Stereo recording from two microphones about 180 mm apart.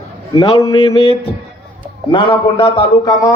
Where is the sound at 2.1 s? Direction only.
30° left (ahead or behind).